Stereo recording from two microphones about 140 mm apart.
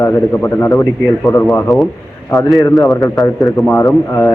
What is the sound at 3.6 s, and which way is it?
Speech, centre (ahead or behind).